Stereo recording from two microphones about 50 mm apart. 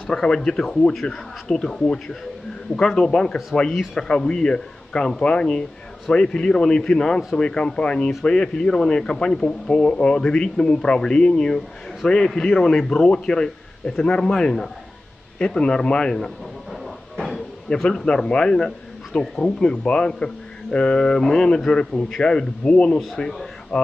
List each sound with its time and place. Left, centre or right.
0.0 s a man's voice: centre
16.8 s cupboard open or close: centre
17.6 s a man's voice: centre